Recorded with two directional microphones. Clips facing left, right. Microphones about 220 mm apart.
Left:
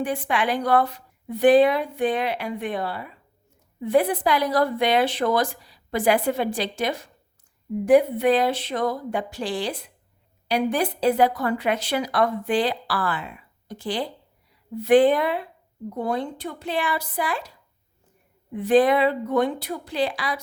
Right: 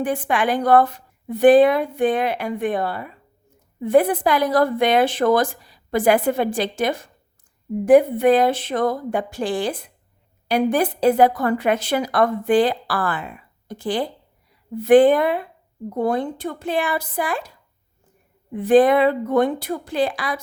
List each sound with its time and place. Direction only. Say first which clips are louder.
0.0 s a woman's voice: right 3 dB; 50° right (ahead or behind)
18.5 s a woman's voice: right 4 dB; 50° right (ahead or behind)